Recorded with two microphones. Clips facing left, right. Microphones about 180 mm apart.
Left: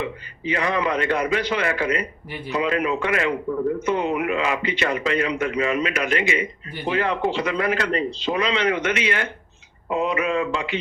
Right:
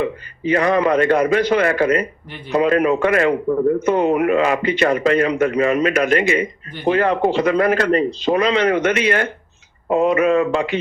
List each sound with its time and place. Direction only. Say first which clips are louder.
0.0 s a man's voice: right 7 dB; 45° right (ahead or behind)